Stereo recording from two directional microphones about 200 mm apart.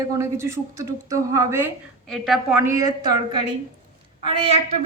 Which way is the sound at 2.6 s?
15° right (ahead or behind).